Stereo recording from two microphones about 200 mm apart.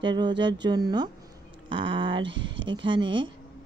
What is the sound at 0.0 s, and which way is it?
Speech, 20° right (ahead or behind).